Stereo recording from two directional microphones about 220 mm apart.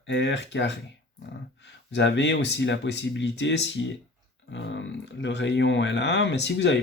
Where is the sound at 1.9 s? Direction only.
55° left (ahead or behind).